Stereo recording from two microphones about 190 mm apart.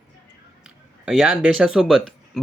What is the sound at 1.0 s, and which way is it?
Speech, centre (ahead or behind).